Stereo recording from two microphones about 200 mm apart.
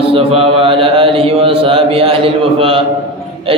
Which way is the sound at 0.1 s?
25° right (ahead or behind).